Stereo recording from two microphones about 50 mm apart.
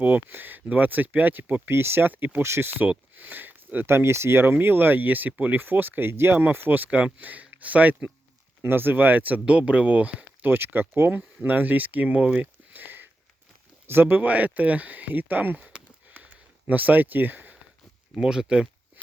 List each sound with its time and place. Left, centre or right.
0.0 s speech: right
1.7 s speech: right
2.4 s speech: right
3.2 s a sound: right
3.8 s speech: right
6.1 s speech: right
6.4 s speech: right
8.6 s speech: right
10.5 s speech: right
16.1 s a sound: right
18.1 s speech: centre